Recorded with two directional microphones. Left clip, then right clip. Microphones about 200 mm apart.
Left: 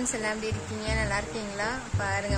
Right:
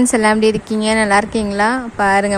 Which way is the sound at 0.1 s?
45° right (ahead or behind).